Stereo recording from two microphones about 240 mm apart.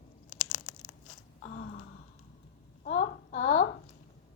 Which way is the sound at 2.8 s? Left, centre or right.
Left.